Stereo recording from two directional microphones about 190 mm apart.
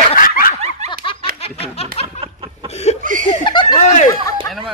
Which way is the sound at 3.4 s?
25° left (ahead or behind).